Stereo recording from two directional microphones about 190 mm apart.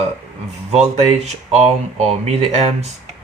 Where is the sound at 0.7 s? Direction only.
35° right (ahead or behind).